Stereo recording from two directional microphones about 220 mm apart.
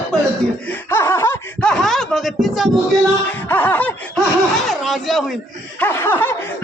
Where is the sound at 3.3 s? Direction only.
10° left (ahead or behind).